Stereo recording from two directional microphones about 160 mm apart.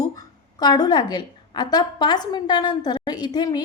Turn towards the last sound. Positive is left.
turn(degrees=25)  # may be behind; listen again after turning